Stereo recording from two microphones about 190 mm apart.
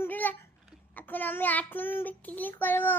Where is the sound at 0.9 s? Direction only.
10° left (ahead or behind).